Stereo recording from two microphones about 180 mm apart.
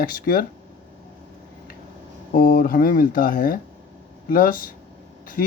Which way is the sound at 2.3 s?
50° left (ahead or behind).